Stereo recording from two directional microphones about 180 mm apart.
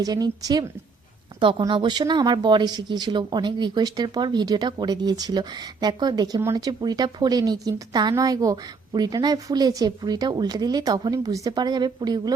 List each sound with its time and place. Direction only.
0.0 s speech: 20° right (ahead or behind)